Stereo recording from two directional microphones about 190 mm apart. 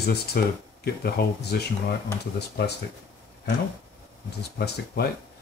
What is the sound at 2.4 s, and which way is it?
Speech, 60° left (ahead or behind).